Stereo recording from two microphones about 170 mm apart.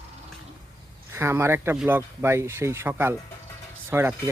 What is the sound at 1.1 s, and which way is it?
Speech, 15° right (ahead or behind).